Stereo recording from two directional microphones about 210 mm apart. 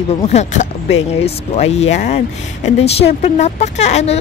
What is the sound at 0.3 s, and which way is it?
Speech, 35° left (ahead or behind).